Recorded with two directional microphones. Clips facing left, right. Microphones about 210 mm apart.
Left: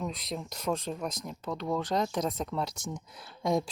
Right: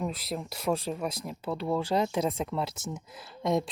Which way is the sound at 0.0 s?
5° right (ahead or behind).